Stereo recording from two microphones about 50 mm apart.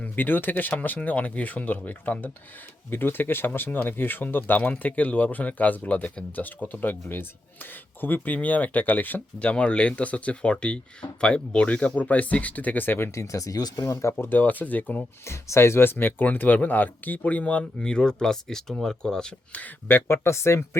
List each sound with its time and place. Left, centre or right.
0.0 s speech: left
2.9 s speech: left
9.4 s speech: left
13.1 s speech: left
14.3 s speech: left
15.2 s speech: left
17.7 s speech: centre
19.9 s speech: left